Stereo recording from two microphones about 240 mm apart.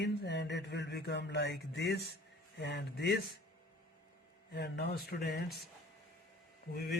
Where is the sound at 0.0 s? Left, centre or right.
Left.